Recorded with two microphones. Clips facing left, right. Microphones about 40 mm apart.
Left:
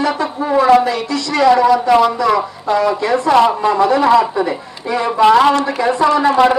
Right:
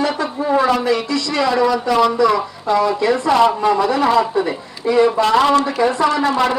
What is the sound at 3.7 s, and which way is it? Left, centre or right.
A man's voice, left.